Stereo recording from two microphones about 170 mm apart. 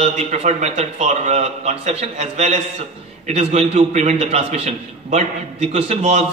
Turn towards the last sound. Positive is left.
turn(degrees=-40)  # may be behind; listen again after turning